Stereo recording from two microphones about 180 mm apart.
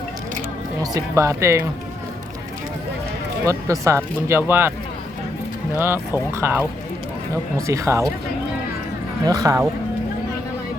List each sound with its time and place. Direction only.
0.8 s speech: 20° right (ahead or behind)
3.4 s speech: 15° right (ahead or behind)
6.3 s speech: 10° right (ahead or behind)
7.7 s speech: 15° right (ahead or behind)
9.2 s speech: 20° right (ahead or behind)